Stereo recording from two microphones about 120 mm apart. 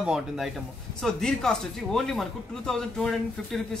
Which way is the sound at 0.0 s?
5° right (ahead or behind).